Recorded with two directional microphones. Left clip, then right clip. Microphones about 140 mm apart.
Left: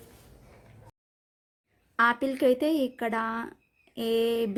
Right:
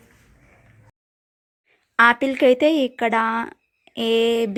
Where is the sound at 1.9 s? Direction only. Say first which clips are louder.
Right 9 dB; 20° right (ahead or behind).